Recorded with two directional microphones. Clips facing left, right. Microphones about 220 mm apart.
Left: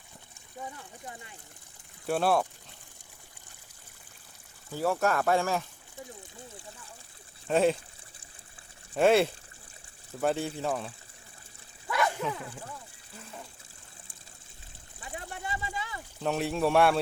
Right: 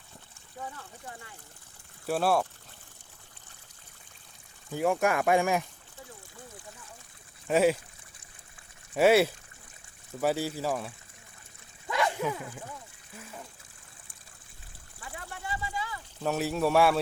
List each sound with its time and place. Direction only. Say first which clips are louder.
0.6 s speech: even; 15° left (ahead or behind)
2.0 s speech: even; centre (ahead or behind)
4.7 s speech: right 1 dB; 15° right (ahead or behind)
7.4 s speech: right 1 dB; 5° right (ahead or behind)
8.9 s speech: right 1 dB; 5° right (ahead or behind)
11.9 s a sound: right 1 dB; 20° right (ahead or behind)
15.0 s a sound: left 2 dB; 20° left (ahead or behind)
16.2 s speech: even; 5° right (ahead or behind)